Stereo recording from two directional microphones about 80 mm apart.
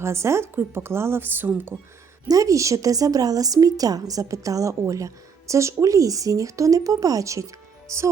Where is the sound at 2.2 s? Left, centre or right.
Right.